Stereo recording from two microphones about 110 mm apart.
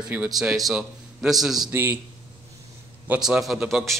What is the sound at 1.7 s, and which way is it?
Speech, 15° right (ahead or behind).